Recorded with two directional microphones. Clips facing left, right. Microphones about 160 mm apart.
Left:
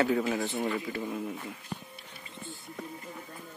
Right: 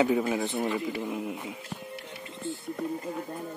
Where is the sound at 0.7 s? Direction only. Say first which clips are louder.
Right 3 dB; 5° right (ahead or behind).